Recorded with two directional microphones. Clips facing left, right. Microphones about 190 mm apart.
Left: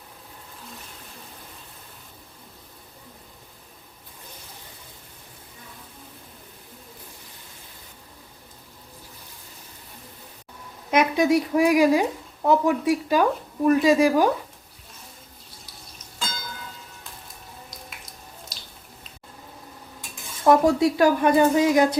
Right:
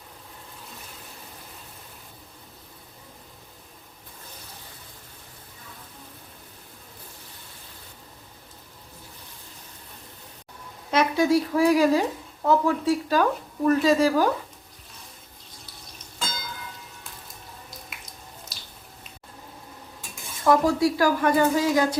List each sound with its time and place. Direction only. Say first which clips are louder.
10.9 s speech: left 1 dB; 20° left (ahead or behind)
18.5 s a sound: left 1 dB; 5° right (ahead or behind)
20.4 s a woman's voice: left 2 dB; 25° left (ahead or behind)